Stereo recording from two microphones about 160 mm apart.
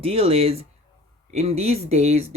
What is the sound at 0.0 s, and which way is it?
Speech, 40° right (ahead or behind).